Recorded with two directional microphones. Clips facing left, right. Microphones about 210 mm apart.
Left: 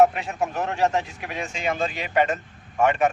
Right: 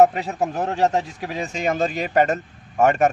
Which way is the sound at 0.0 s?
35° right (ahead or behind).